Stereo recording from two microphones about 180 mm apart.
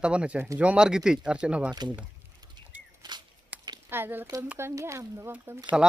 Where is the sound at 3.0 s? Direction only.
25° right (ahead or behind).